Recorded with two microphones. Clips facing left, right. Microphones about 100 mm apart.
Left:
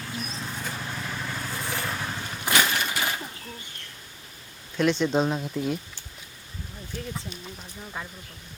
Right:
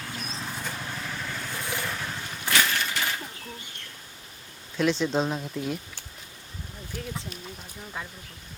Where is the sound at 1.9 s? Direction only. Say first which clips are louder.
Left 2 dB; 15° left (ahead or behind).